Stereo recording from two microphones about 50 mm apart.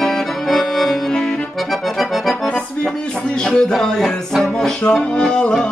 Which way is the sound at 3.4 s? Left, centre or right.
Centre.